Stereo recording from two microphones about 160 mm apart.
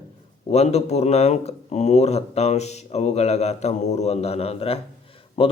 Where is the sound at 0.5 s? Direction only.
40° left (ahead or behind).